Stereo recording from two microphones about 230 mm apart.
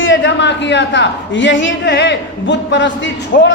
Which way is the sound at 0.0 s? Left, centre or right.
Left.